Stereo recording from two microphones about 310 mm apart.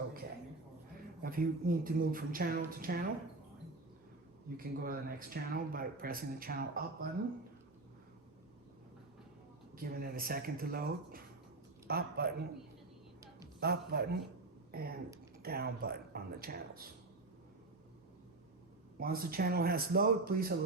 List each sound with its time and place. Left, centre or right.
1.2 s speech: right
4.5 s speech: right
9.7 s speech: right
13.6 s a man's voice: right
18.9 s speech: right